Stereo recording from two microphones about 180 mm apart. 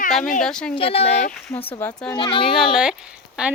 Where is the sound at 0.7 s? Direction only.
30° left (ahead or behind).